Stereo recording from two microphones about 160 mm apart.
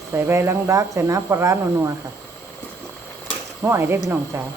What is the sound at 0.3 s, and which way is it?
Speech, 15° right (ahead or behind).